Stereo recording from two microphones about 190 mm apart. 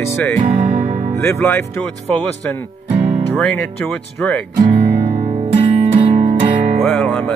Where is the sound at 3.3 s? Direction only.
5° left (ahead or behind).